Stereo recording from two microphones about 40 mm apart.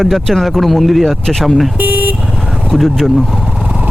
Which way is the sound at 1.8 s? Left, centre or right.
Right.